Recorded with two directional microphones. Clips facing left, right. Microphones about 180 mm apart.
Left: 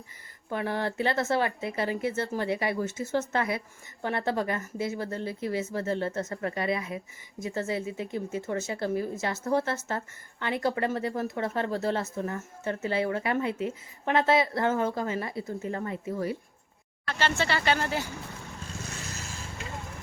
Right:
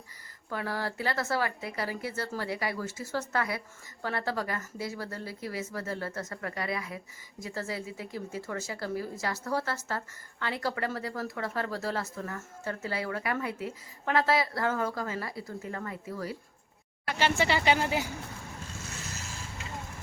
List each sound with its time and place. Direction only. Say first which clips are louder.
0.5 s speech: left 4 dB; 20° left (ahead or behind)
17.1 s speech: right 1 dB; 15° right (ahead or behind)